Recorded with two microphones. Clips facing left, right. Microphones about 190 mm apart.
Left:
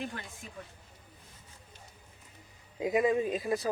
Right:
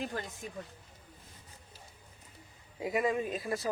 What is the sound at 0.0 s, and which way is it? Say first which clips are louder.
Speech: right 2 dB; 40° right (ahead or behind).